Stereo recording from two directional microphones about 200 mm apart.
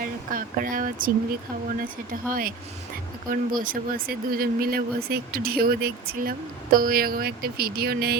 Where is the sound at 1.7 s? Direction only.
45° right (ahead or behind).